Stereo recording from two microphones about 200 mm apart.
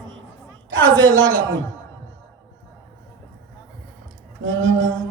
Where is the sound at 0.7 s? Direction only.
70° right (ahead or behind).